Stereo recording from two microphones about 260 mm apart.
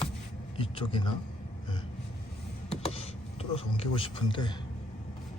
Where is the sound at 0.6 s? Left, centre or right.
Centre.